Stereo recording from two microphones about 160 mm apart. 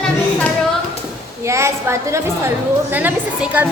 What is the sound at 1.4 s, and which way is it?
A woman's voice, 15° right (ahead or behind).